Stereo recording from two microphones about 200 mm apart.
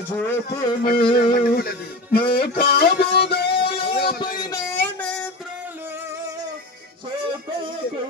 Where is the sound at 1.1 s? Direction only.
50° left (ahead or behind).